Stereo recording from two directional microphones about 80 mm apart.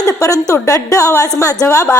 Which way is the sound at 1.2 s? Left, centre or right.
Left.